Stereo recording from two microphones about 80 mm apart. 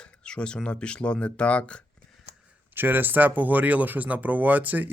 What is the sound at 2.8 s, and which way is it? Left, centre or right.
Speech, right.